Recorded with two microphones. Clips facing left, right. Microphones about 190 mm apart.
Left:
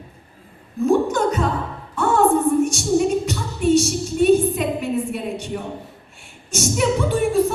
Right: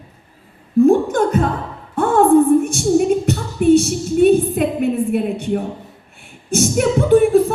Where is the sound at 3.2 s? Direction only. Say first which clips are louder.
Right 6 dB; 55° right (ahead or behind).